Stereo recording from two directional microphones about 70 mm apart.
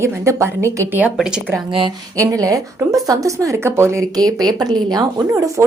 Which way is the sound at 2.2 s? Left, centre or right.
Right.